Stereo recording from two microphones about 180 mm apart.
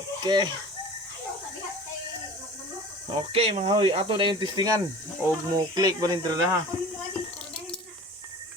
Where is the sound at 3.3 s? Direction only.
30° right (ahead or behind).